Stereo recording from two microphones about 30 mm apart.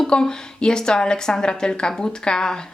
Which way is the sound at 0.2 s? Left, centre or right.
Left.